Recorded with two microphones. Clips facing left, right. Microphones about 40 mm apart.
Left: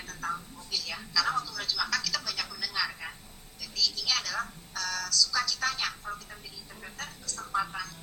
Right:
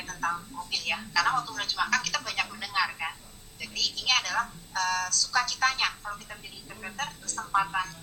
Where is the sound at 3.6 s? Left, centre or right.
Right.